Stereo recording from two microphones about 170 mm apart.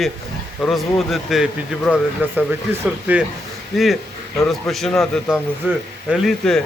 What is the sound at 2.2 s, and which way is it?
A man's voice, 10° right (ahead or behind).